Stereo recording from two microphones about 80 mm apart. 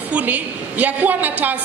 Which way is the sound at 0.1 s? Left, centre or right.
Right.